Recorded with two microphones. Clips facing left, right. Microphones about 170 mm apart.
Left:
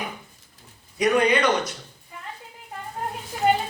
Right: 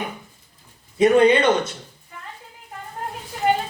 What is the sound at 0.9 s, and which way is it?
Speech, 25° right (ahead or behind).